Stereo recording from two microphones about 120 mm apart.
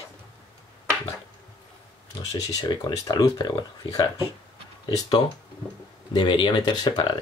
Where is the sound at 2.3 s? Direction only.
30° left (ahead or behind).